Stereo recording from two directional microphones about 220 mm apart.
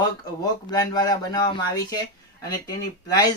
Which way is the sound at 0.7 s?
20° left (ahead or behind).